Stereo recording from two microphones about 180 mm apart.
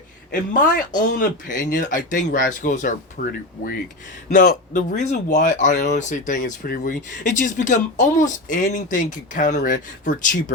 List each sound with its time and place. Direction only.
0.8 s speech: 50° left (ahead or behind)